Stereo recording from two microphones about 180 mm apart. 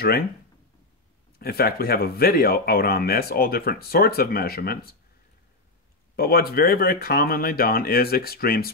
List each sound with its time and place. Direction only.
1.4 s speech: 55° left (ahead or behind)
6.1 s speech: 55° left (ahead or behind)